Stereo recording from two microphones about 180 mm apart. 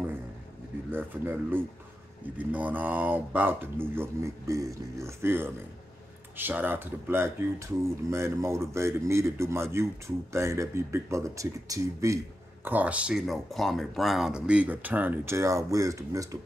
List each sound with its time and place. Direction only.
0.9 s speech: 10° right (ahead or behind)